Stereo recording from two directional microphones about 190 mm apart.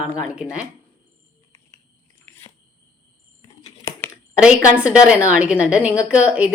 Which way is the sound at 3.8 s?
15° left (ahead or behind).